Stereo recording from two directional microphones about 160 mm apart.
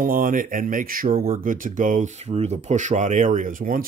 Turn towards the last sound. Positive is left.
turn(degrees=-60)  # may be behind; listen again after turning